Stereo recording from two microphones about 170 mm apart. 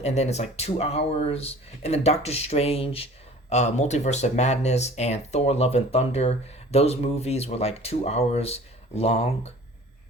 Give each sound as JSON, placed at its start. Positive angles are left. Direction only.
{"t": 0.0, "sound": "speech", "side_deg": 40}